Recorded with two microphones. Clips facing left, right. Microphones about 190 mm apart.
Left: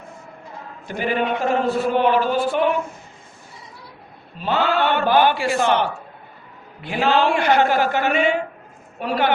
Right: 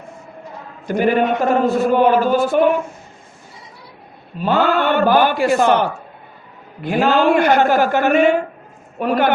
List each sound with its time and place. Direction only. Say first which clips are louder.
0.9 s a man's voice: right 6 dB; 45° right (ahead or behind)
4.4 s a man's voice: right 4 dB; 45° right (ahead or behind)